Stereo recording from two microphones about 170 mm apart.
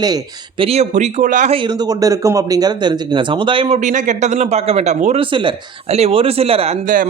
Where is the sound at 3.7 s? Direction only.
45° right (ahead or behind).